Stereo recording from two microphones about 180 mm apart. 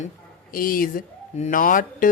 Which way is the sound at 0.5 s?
50° left (ahead or behind).